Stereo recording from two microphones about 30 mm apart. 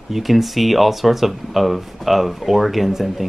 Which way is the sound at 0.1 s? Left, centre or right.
Centre.